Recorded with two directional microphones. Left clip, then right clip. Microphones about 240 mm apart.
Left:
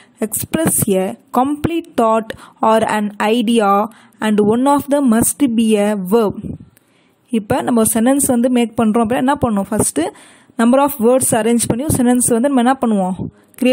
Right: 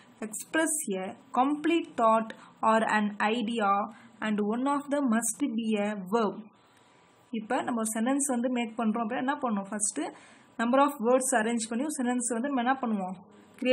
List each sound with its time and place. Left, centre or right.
0.2 s a woman's voice: left